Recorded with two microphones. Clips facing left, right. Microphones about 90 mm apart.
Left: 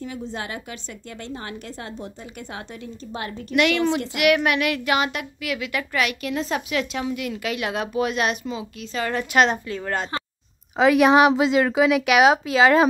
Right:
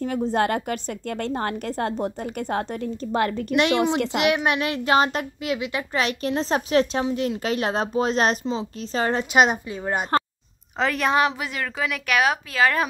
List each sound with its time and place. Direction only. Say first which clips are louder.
0.0 s a woman's voice: right 9 dB; 50° right (ahead or behind)
3.5 s speech: left 1 dB; 30° right (ahead or behind)
9.2 s speech: left 1 dB; 20° right (ahead or behind)
10.8 s speech: left 6 dB; 10° left (ahead or behind)
11.3 s speech: left 10 dB; 20° left (ahead or behind)